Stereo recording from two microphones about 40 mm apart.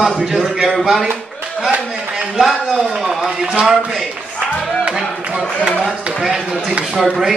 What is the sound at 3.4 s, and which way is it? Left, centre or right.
Speech, centre.